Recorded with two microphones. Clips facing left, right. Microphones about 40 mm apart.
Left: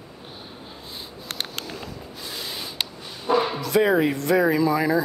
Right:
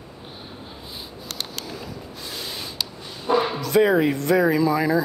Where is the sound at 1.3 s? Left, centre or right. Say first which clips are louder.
Left 2 dB; left.